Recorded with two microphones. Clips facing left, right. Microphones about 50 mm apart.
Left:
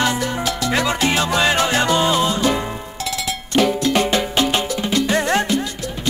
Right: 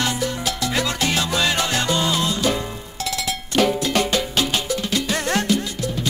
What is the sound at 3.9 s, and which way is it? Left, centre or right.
Music, left.